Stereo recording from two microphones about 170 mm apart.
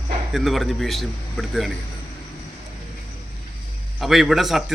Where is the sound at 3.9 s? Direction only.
Centre (ahead or behind).